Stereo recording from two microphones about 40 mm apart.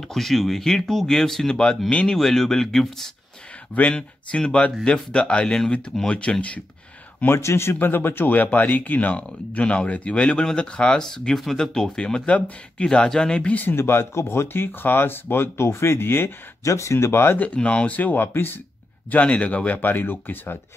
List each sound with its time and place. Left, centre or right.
0.0 s speech: centre
1.5 s speech: left
2.1 s speech: centre
3.9 s speech: left
7.2 s a man's voice: left
7.8 s speech: left
8.4 s speech: left
9.1 s speech: left
13.7 s a man's voice: left
17.6 s speech: left
17.9 s speech: left
18.2 s speech: left
19.0 s speech: left
19.8 s speech: left